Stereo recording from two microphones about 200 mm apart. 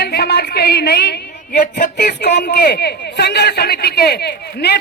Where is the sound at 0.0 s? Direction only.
50° left (ahead or behind).